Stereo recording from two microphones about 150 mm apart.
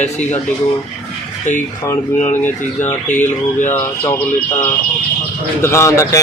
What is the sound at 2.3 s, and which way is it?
Speech, 15° left (ahead or behind).